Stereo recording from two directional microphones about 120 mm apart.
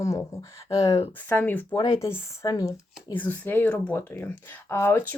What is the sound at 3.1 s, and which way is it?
Speech, 15° left (ahead or behind).